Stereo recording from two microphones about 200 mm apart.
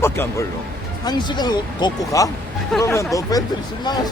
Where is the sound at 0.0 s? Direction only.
10° left (ahead or behind).